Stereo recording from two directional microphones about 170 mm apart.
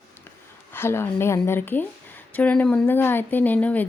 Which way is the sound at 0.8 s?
15° left (ahead or behind).